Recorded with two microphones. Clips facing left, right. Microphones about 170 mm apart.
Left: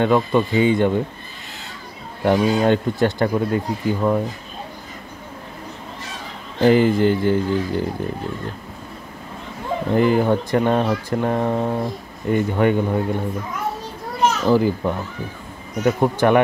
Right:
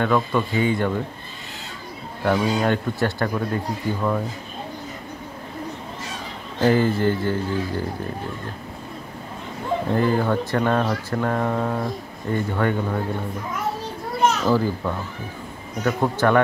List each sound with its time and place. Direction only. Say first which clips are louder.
0.0 s speech: left 4 dB; 20° left (ahead or behind)
2.2 s speech: left 4 dB; 15° left (ahead or behind)
6.6 s speech: left 4 dB; 15° left (ahead or behind)
9.9 s speech: left 5 dB; 15° left (ahead or behind)
14.5 s speech: left 4 dB; 15° left (ahead or behind)